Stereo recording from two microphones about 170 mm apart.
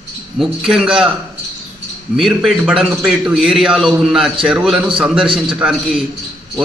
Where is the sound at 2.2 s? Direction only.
Centre (ahead or behind).